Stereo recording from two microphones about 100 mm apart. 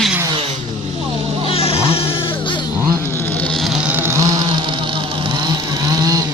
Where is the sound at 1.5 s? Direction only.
80° left.